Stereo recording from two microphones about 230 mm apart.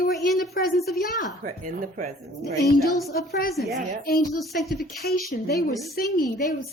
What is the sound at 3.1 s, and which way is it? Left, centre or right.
Speech, left.